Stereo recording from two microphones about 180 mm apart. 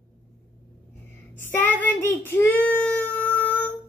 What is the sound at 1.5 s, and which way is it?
Child singing, 10° left (ahead or behind).